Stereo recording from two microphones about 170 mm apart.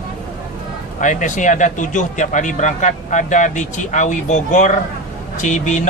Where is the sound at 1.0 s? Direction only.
50° left (ahead or behind).